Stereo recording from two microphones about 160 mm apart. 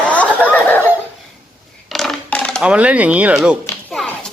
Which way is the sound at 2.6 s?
10° right (ahead or behind).